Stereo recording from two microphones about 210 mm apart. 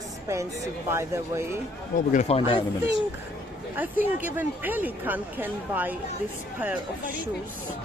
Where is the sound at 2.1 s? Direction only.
35° left (ahead or behind).